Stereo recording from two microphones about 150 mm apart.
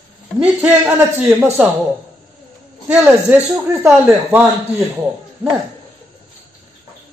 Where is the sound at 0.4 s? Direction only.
5° right (ahead or behind).